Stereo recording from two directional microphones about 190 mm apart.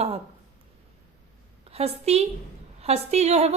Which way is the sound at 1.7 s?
30° right (ahead or behind).